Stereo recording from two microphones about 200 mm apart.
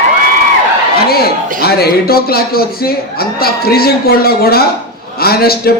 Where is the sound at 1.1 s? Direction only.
50° left (ahead or behind).